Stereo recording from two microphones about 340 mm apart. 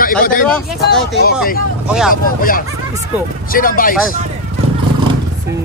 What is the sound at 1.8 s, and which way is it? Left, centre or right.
Speech, centre.